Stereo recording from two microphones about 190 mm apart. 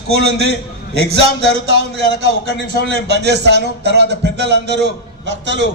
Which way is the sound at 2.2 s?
60° right (ahead or behind).